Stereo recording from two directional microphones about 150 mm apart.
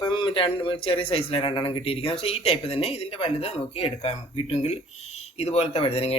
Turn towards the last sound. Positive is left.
turn(degrees=40)  # may be behind; listen again after turning